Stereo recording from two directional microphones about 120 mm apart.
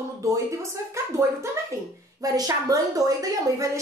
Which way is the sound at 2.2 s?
30° right (ahead or behind).